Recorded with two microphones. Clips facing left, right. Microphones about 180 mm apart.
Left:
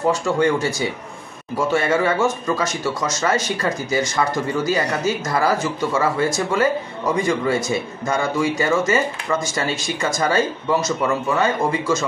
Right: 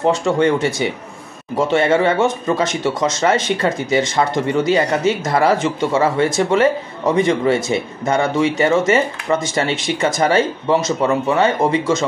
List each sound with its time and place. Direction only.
0.0 s speech: 25° right (ahead or behind)